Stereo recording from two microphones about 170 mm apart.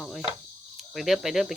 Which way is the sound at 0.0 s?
Centre (ahead or behind).